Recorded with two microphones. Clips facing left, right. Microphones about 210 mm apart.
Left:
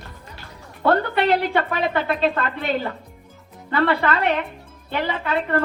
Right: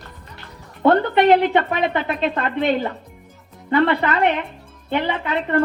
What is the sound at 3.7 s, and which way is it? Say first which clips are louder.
Speech: right 2 dB; 20° right (ahead or behind).